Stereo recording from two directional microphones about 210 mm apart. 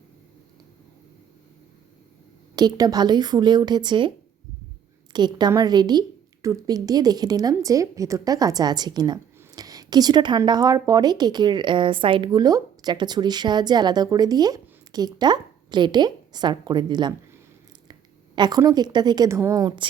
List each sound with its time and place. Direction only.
2.6 s a woman's voice: 20° right (ahead or behind)
5.1 s a woman's voice: 20° right (ahead or behind)
18.3 s a woman's voice: 20° right (ahead or behind)